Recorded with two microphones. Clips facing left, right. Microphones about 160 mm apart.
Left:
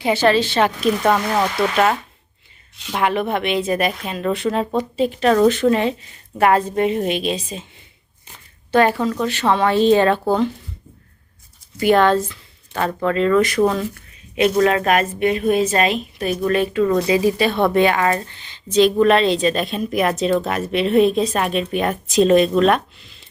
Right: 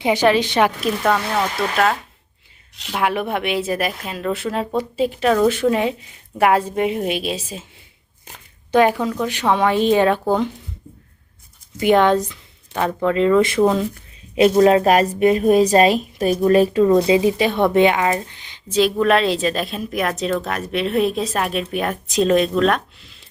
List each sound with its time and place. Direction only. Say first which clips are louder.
0.0 s a woman's voice: even; 15° right (ahead or behind)
2.9 s a woman's voice: left 1 dB; 5° right (ahead or behind)
8.7 s a woman's voice: even; 15° right (ahead or behind)
11.8 s a woman's voice: even; 20° right (ahead or behind)
14.3 s a woman's voice: right 3 dB; 30° right (ahead or behind)
16.9 s speech: right 2 dB; 25° right (ahead or behind); by 23.1 s centre (ahead or behind)